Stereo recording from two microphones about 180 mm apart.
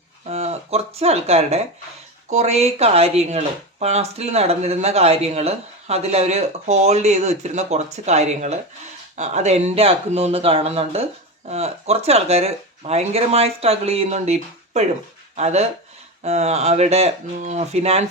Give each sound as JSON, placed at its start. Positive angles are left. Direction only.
{"t": 0.3, "sound": "speech", "side_deg": -35}